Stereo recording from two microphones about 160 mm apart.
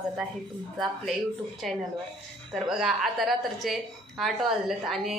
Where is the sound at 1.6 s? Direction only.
Centre (ahead or behind).